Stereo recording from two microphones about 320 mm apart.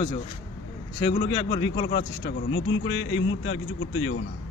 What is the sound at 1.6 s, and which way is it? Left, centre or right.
A man's voice, left.